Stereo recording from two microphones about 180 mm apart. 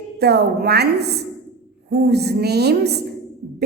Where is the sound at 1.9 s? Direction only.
65° right (ahead or behind).